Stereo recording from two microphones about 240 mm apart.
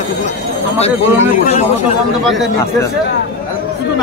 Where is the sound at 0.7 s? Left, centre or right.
Left.